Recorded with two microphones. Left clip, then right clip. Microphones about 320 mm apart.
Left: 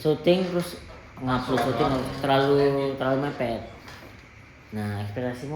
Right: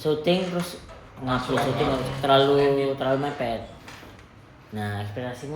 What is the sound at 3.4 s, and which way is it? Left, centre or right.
Speech, left.